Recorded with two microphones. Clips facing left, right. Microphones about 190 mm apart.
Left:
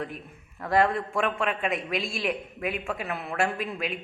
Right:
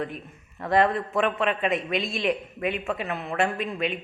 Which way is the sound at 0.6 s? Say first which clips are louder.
Right 2 dB; centre (ahead or behind).